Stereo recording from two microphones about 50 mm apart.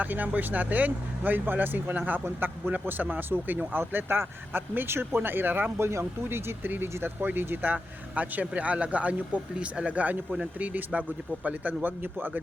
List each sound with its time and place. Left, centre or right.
0.0 s speech: right